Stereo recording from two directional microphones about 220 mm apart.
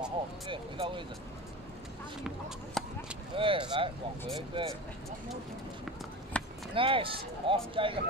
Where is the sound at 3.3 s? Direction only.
25° right (ahead or behind).